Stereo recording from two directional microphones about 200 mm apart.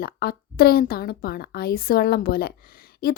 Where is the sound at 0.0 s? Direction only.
50° left (ahead or behind).